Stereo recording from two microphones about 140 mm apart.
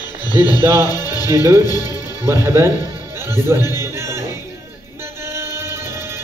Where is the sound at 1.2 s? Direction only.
20° right (ahead or behind).